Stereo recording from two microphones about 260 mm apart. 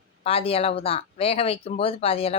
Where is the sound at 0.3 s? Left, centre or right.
Left.